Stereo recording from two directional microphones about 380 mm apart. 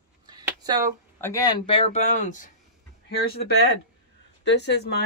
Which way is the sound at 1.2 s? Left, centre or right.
Centre.